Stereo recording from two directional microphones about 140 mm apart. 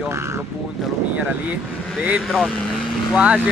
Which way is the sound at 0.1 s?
20° right (ahead or behind).